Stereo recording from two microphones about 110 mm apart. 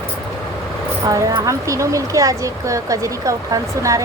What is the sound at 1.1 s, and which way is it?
Speech, 30° right (ahead or behind).